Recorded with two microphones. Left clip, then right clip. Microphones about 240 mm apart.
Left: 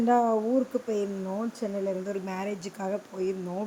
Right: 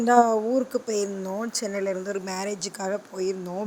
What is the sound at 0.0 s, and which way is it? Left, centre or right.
Speech, right.